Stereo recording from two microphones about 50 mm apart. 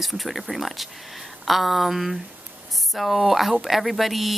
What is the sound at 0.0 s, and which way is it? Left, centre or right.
Speech, centre.